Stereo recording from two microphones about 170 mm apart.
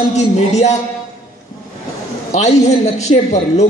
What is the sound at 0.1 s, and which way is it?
Speech, 40° left (ahead or behind).